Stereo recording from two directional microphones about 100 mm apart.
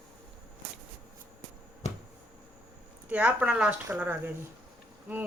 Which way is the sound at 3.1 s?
15° right (ahead or behind).